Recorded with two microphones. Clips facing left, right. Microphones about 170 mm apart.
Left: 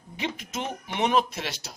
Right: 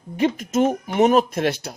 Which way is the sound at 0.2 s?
45° right (ahead or behind).